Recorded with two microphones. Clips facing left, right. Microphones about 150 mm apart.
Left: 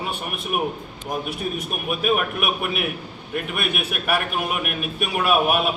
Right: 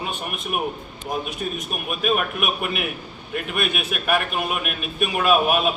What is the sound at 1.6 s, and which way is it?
A man's voice, 10° left (ahead or behind).